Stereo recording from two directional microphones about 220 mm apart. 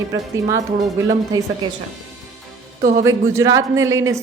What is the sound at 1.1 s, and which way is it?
Speech, 15° right (ahead or behind).